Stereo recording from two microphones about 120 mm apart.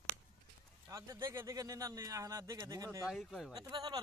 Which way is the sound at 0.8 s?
25° right (ahead or behind).